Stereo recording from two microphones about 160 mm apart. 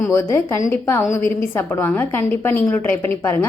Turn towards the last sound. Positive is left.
turn(degrees=15)  # may be behind; listen again after turning